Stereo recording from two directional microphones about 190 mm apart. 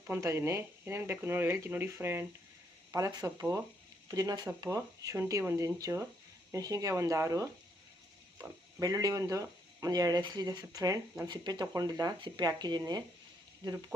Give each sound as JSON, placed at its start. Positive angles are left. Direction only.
{"t": 0.1, "sound": "speech", "side_deg": -15}